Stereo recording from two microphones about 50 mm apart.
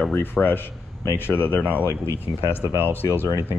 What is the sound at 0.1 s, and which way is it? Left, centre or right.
Speech, left.